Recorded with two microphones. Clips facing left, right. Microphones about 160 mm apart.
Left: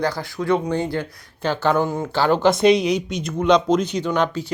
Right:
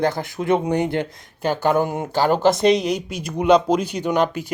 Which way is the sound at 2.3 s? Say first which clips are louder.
Left 1 dB; 5° right (ahead or behind).